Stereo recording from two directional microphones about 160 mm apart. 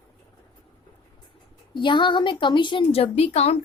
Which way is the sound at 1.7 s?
30° left (ahead or behind).